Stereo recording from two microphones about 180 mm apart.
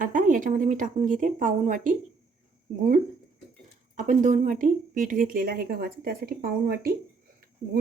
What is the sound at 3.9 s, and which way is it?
Speech, 45° right (ahead or behind).